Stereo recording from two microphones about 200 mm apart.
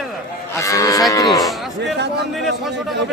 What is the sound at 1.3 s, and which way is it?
A man's voice, centre (ahead or behind).